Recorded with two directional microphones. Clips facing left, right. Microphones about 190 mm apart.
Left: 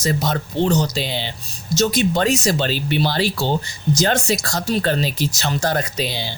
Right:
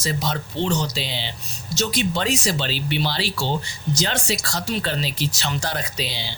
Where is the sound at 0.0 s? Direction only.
45° left (ahead or behind).